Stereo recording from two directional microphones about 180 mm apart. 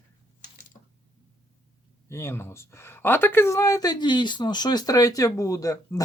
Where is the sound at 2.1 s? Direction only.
15° left (ahead or behind).